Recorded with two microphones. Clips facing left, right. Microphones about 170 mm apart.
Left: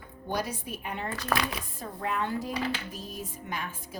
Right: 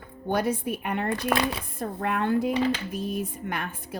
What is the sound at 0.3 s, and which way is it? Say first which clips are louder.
A woman's voice: right 7 dB; 55° right (ahead or behind).